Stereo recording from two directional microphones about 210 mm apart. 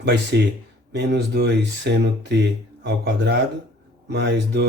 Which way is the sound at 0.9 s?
50° right (ahead or behind).